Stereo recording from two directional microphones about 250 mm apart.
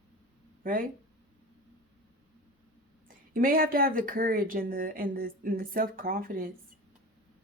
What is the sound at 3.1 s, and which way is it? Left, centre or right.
Speech, right.